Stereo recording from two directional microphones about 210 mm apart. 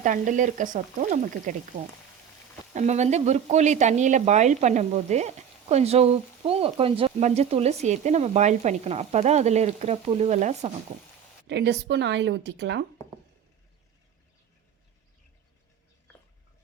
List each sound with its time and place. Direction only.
0.0 s speech: 40° right (ahead or behind)
2.7 s speech: 35° right (ahead or behind)
11.4 s speech: 55° right (ahead or behind)